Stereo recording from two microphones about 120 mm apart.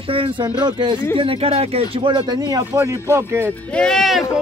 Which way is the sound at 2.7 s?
25° right (ahead or behind).